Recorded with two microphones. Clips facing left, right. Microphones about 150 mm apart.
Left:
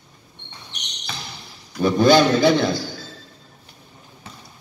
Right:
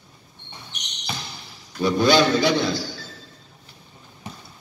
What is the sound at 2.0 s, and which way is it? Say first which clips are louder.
Speech: left 3 dB; 50° left (ahead or behind).